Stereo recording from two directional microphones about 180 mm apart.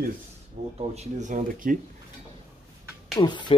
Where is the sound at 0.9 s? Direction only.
45° right (ahead or behind).